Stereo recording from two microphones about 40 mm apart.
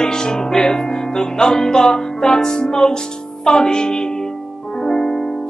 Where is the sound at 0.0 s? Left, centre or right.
Centre.